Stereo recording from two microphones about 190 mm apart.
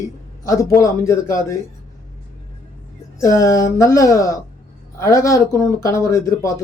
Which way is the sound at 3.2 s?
15° left (ahead or behind).